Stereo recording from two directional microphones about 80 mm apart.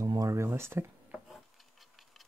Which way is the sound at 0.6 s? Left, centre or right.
Right.